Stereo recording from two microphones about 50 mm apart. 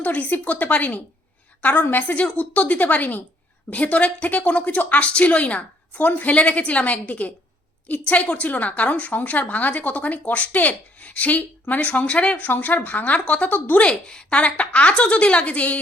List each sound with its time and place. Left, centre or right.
0.0 s a woman's voice: left
13.8 s a woman's voice: centre